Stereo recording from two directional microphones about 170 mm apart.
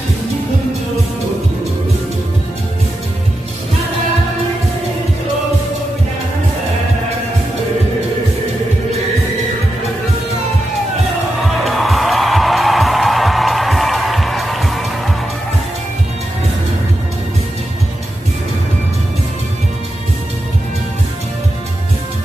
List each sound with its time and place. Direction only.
11.4 s music: centre (ahead or behind)